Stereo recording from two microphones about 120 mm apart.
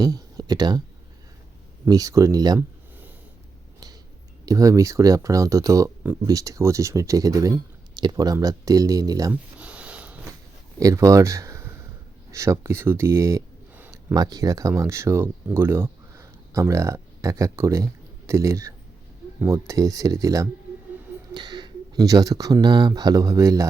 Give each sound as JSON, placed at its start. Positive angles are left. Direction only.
{"t": 0.0, "sound": "speech", "side_deg": -30}
{"t": 1.9, "sound": "speech", "side_deg": -30}
{"t": 4.4, "sound": "speech", "side_deg": -30}
{"t": 9.3, "sound": "a sound", "side_deg": -10}
{"t": 10.8, "sound": "speech", "side_deg": -25}
{"t": 21.3, "sound": "a sound", "side_deg": -35}
{"t": 22.6, "sound": "speech", "side_deg": -35}